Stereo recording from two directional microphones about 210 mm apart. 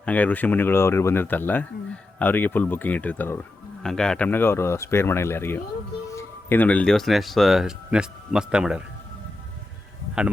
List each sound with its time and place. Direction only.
0.0 s speech: 5° left (ahead or behind)